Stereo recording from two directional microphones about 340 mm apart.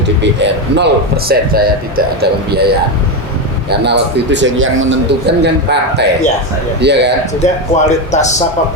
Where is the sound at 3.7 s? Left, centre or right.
Right.